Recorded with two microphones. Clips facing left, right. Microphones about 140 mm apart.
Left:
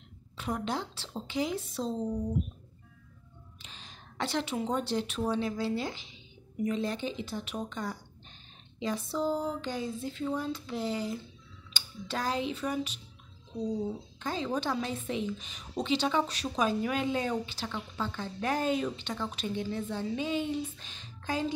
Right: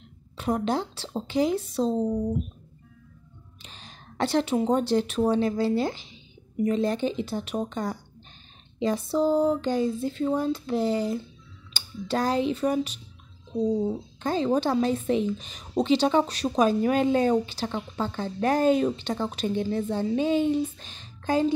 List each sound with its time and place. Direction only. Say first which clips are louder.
0.4 s a woman's voice: right 7 dB; 40° right (ahead or behind)
3.6 s a woman's voice: right 5 dB; 45° right (ahead or behind)